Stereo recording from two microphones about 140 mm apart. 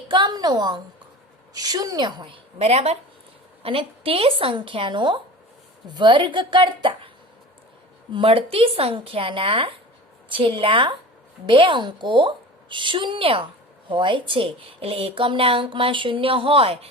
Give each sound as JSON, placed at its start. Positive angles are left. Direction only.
{"t": 0.1, "sound": "a woman's voice", "side_deg": -30}
{"t": 8.1, "sound": "a woman's voice", "side_deg": -40}